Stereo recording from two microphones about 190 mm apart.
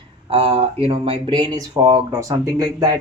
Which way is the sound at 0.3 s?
30° right (ahead or behind).